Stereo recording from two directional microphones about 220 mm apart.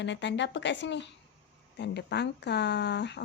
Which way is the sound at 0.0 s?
55° left (ahead or behind).